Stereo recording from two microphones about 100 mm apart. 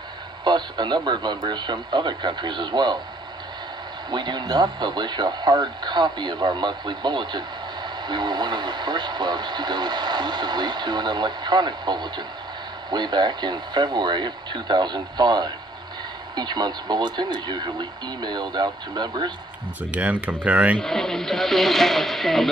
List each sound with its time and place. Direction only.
0.4 s speech: 50° right (ahead or behind)
4.1 s speech: 50° right (ahead or behind)
19.9 s speech: 15° right (ahead or behind)
20.8 s speech: 5° left (ahead or behind)